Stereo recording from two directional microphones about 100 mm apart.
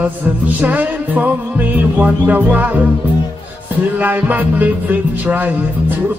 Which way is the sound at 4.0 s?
15° right (ahead or behind).